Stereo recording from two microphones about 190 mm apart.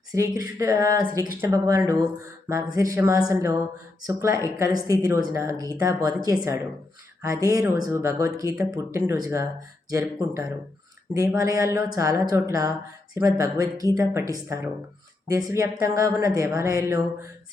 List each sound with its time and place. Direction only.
0.1 s speech: 15° right (ahead or behind)